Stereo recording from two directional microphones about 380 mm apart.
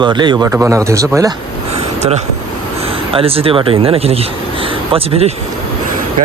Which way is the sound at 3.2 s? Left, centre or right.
Centre.